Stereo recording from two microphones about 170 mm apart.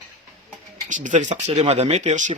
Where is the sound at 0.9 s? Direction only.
45° right (ahead or behind).